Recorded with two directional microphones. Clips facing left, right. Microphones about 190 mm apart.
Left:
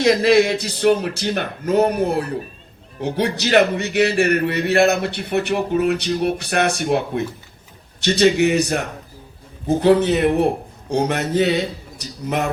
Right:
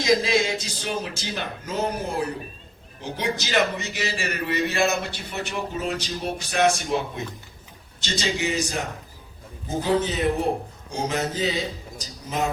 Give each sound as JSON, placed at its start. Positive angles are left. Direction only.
{"t": 0.0, "sound": "a man's voice", "side_deg": 65}